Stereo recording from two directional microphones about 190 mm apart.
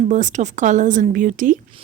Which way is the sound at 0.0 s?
40° right (ahead or behind).